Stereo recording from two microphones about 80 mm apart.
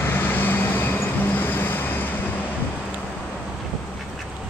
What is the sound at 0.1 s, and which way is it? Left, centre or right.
Vehicle, left.